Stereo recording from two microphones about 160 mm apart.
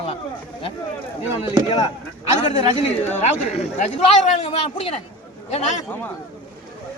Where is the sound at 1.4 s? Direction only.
30° left (ahead or behind).